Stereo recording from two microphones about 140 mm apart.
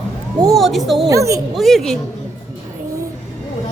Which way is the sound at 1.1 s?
25° right (ahead or behind).